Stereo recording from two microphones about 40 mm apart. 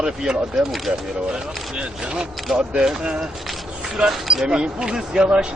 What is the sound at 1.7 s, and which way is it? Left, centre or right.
Speech, right.